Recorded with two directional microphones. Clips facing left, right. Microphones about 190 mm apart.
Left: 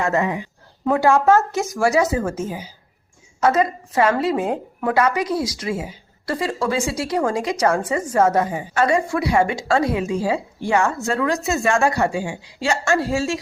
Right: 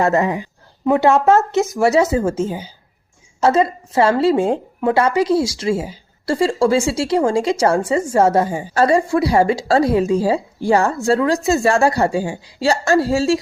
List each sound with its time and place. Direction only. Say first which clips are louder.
0.0 s a woman's voice: right 4 dB; 35° right (ahead or behind)
0.9 s a woman's voice: right 2 dB; 25° right (ahead or behind)